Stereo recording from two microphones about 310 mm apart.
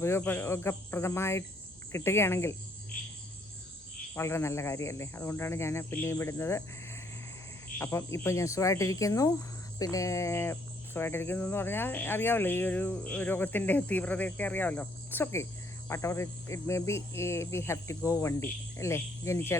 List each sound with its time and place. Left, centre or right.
0.0 s speech: centre
4.1 s speech: centre